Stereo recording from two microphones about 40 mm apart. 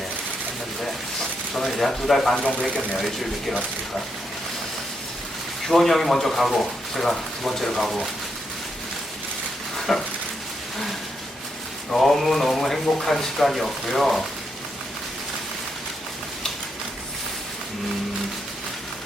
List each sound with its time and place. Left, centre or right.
1.5 s speech: centre
2.4 s speech: left
3.0 s speech: centre
5.6 s speech: centre
9.9 s speech: centre
11.9 s speech: centre